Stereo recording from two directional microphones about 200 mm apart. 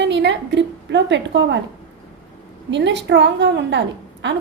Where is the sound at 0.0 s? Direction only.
65° right (ahead or behind).